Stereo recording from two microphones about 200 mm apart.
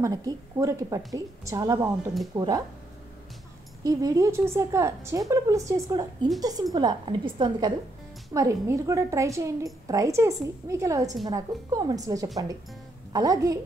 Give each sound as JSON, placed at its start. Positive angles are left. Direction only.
{"t": 0.0, "sound": "a woman's voice", "side_deg": -20}
{"t": 3.8, "sound": "a woman's voice", "side_deg": -20}